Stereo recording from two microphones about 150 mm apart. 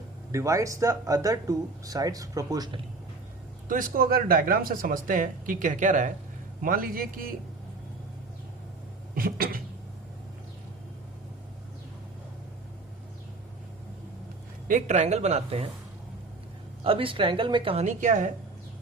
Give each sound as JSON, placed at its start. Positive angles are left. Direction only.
{"t": 0.3, "sound": "speech", "side_deg": -20}
{"t": 3.7, "sound": "speech", "side_deg": -65}
{"t": 6.6, "sound": "a man's voice", "side_deg": -70}
{"t": 9.1, "sound": "a man's voice", "side_deg": -75}
{"t": 14.7, "sound": "speech", "side_deg": -55}
{"t": 16.8, "sound": "a woman's voice", "side_deg": -35}
{"t": 17.8, "sound": "speech", "side_deg": -55}